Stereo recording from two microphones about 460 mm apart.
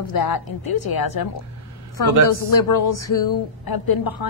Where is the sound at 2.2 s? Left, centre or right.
Left.